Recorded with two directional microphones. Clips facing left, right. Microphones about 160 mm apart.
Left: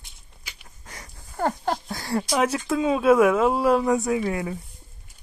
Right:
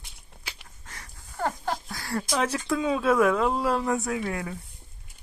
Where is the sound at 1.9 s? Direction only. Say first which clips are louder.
Left 4 dB; 20° left (ahead or behind).